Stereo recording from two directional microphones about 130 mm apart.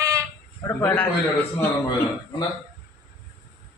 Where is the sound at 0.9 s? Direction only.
10° left (ahead or behind).